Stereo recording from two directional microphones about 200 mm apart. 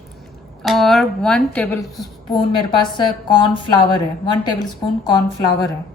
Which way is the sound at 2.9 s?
25° left (ahead or behind).